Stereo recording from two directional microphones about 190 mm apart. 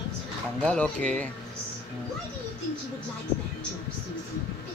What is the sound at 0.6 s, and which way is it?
Speech, 5° left (ahead or behind).